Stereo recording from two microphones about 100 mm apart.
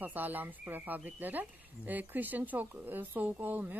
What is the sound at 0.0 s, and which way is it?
Speech, 20° right (ahead or behind).